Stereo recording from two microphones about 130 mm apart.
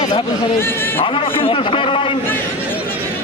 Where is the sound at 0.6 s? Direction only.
15° left (ahead or behind).